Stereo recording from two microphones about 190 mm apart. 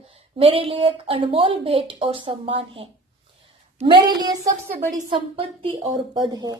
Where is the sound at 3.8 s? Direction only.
25° right (ahead or behind).